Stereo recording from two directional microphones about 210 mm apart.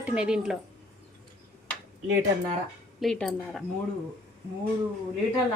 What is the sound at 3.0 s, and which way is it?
Speech, centre (ahead or behind).